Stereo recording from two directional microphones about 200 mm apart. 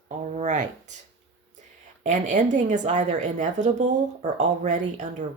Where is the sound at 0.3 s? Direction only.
35° right (ahead or behind).